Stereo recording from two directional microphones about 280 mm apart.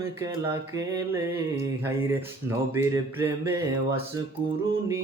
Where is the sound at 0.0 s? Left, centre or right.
Centre.